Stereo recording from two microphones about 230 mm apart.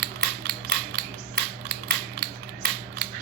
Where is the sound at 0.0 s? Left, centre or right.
Right.